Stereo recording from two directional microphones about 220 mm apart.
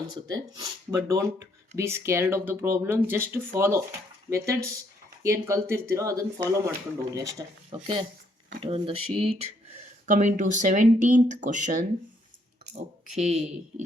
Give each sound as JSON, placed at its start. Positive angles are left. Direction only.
{"t": 0.1, "sound": "speech", "side_deg": -20}
{"t": 8.6, "sound": "speech", "side_deg": -25}